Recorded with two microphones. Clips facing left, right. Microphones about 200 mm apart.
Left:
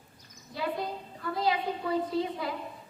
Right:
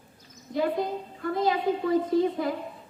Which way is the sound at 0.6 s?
50° right (ahead or behind).